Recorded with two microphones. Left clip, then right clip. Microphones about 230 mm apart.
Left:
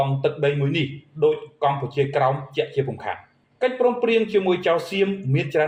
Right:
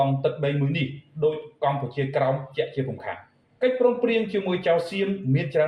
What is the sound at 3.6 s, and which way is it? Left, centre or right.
Speech, left.